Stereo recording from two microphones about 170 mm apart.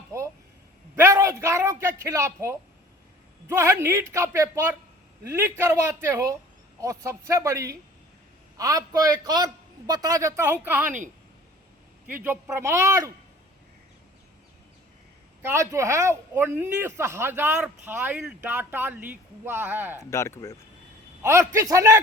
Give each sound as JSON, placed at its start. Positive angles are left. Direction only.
{"t": 0.1, "sound": "a sound", "side_deg": -20}
{"t": 0.9, "sound": "a man's voice", "side_deg": -15}
{"t": 12.0, "sound": "speech", "side_deg": -10}
{"t": 15.4, "sound": "speech", "side_deg": -15}
{"t": 20.0, "sound": "speech", "side_deg": 15}
{"t": 21.2, "sound": "speech", "side_deg": -15}